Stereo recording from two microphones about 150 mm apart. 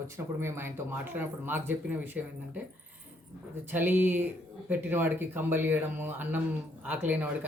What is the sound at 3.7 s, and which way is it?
Speech, 10° right (ahead or behind).